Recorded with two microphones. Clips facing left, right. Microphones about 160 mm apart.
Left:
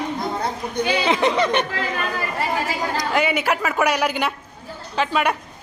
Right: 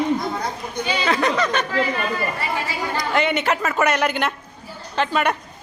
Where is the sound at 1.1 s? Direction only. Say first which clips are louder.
Even; 20° left (ahead or behind).